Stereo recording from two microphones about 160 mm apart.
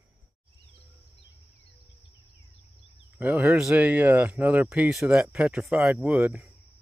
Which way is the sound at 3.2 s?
5° right (ahead or behind).